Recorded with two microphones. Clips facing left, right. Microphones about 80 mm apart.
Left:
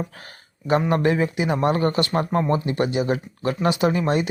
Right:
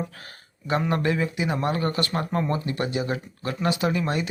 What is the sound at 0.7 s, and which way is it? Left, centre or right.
Speech, left.